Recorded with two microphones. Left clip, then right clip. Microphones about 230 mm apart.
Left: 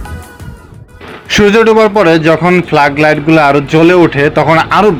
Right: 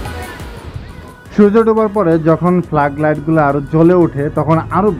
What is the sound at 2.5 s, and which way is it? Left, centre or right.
A man's voice, centre.